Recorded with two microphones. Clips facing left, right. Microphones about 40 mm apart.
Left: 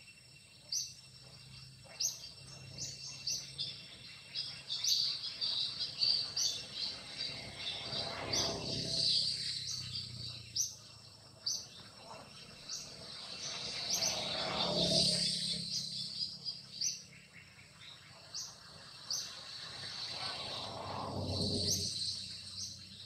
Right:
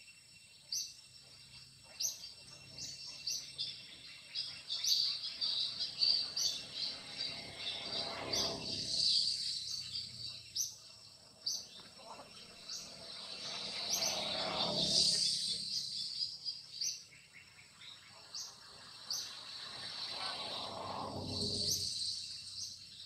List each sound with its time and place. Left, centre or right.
2.0 s bird: centre
3.3 s bird: centre
6.3 s a sound: centre; by 9.8 s left
12.0 s vehicle: centre
12.6 s vehicle: centre
13.6 s bird: centre
13.8 s a sound: centre; by 16.2 s left
16.8 s bird: centre
19.0 s vehicle: centre
21.8 s a sound: left